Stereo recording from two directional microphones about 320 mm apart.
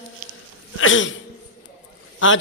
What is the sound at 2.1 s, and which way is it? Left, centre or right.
Speech, left.